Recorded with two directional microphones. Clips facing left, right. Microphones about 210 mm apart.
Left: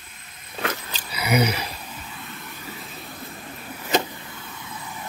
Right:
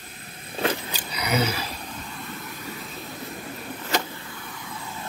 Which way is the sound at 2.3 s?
Centre (ahead or behind).